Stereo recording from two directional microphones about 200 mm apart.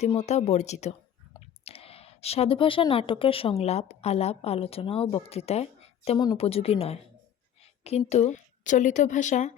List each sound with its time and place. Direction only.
0.0 s a woman's voice: 35° left (ahead or behind)
7.6 s a sound: 30° left (ahead or behind)
8.1 s a woman's voice: 35° left (ahead or behind)